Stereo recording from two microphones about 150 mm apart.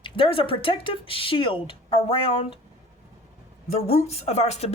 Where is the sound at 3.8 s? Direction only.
45° left (ahead or behind).